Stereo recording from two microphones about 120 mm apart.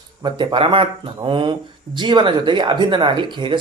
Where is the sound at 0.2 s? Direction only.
40° right (ahead or behind).